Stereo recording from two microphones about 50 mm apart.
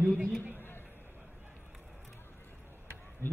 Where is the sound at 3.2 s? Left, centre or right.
Right.